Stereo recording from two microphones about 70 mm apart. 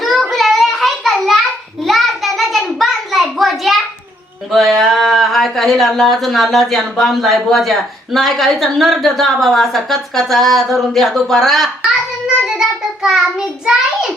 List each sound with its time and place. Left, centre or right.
0.0 s child singing: centre
1.8 s a sound: centre
4.5 s speech: centre
12.5 s child singing: centre